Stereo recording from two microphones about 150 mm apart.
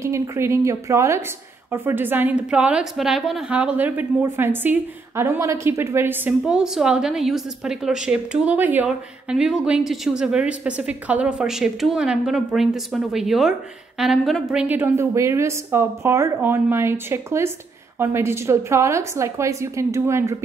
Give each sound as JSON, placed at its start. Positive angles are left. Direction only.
{"t": 0.0, "sound": "a woman's voice", "side_deg": -20}